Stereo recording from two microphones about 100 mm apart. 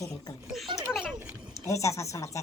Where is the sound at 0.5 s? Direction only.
Centre (ahead or behind).